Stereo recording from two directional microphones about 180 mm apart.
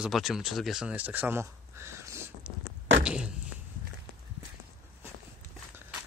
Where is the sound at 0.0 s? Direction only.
Centre (ahead or behind).